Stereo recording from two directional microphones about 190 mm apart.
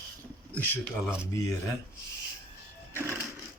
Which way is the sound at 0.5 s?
10° left (ahead or behind).